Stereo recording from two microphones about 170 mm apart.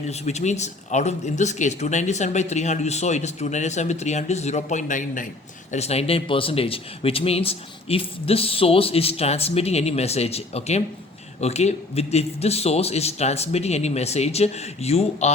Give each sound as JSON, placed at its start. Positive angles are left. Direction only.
{"t": 0.1, "sound": "speech", "side_deg": 40}
{"t": 5.7, "sound": "speech", "side_deg": 40}